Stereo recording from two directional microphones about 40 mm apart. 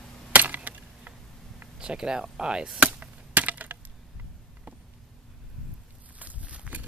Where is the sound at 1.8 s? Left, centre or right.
Right.